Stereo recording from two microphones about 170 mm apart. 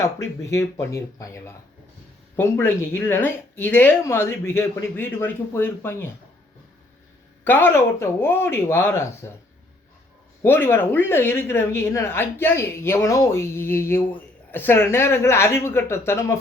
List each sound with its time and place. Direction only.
0.0 s speech: 15° left (ahead or behind)
7.4 s speech: 10° left (ahead or behind)
10.4 s speech: 15° left (ahead or behind)